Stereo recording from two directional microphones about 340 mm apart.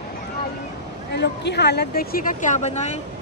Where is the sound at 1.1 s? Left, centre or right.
Left.